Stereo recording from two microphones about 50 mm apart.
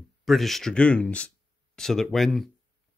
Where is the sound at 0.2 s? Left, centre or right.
Centre.